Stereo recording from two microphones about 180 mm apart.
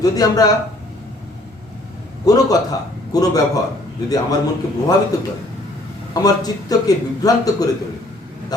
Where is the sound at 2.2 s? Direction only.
20° left (ahead or behind).